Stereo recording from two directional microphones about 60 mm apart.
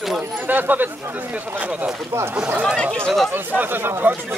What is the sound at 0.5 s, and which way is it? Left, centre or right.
Speech, right.